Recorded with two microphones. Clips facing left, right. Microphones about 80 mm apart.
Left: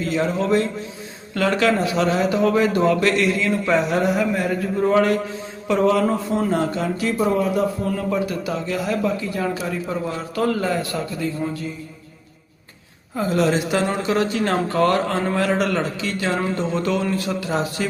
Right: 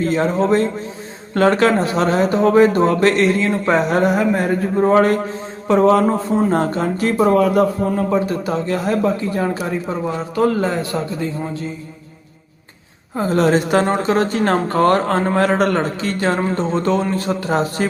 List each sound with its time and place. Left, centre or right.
0.0 s speech: right
7.9 s speech: right
9.8 s a man's voice: right
13.1 s speech: right